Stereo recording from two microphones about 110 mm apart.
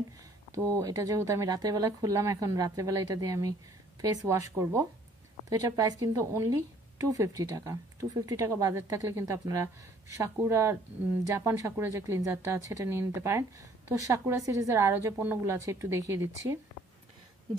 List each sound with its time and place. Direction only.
0.6 s a woman's voice: 30° right (ahead or behind)